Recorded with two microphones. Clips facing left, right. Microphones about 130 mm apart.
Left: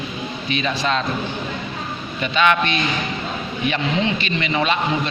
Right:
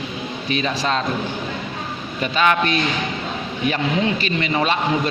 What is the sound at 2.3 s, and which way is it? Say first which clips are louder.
A man's voice: even; 40° right (ahead or behind).